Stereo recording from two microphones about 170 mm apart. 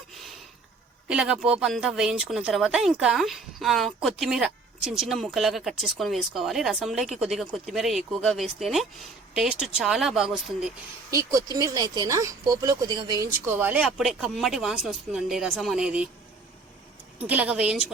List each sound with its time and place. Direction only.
1.0 s speech: 5° right (ahead or behind)
11.1 s speech: 20° right (ahead or behind)
13.6 s speech: 10° right (ahead or behind)
17.2 s speech: 10° right (ahead or behind)